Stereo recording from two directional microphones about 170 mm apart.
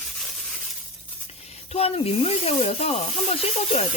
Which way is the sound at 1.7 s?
35° left (ahead or behind).